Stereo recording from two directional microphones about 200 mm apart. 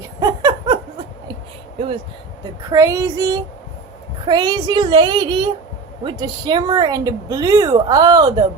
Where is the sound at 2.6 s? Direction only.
15° right (ahead or behind).